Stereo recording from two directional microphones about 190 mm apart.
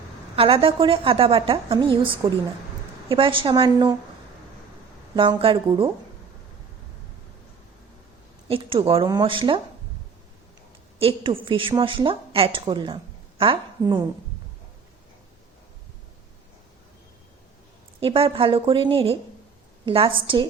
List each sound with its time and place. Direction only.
0.3 s a woman's voice: 30° right (ahead or behind)
5.1 s a woman's voice: 25° right (ahead or behind)
8.4 s a woman's voice: 30° right (ahead or behind)
11.0 s a woman's voice: 30° right (ahead or behind)
18.0 s a woman's voice: 30° right (ahead or behind)